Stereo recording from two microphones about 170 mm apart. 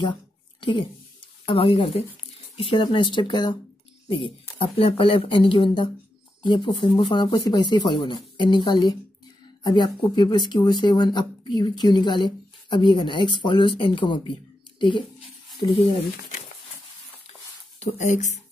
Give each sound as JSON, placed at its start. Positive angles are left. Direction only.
{"t": 0.6, "sound": "speech", "side_deg": 30}
{"t": 17.7, "sound": "speech", "side_deg": 45}